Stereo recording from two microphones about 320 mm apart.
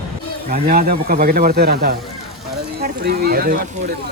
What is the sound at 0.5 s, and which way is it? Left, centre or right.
Speech, right.